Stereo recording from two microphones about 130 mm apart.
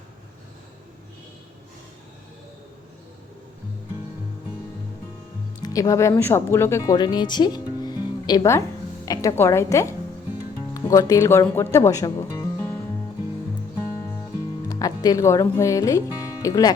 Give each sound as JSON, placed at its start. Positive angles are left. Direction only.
{"t": 5.6, "sound": "speech", "side_deg": 30}
{"t": 6.9, "sound": "speech", "side_deg": 35}
{"t": 9.0, "sound": "speech", "side_deg": 20}
{"t": 14.7, "sound": "speech", "side_deg": 30}